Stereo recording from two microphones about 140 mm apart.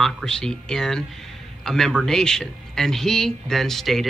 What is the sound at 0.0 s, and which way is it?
Speech, 5° left (ahead or behind).